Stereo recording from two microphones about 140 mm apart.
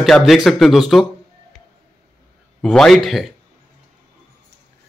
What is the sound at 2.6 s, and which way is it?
Speech, 5° left (ahead or behind).